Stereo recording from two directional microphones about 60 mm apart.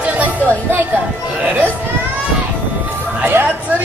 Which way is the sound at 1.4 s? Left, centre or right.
Right.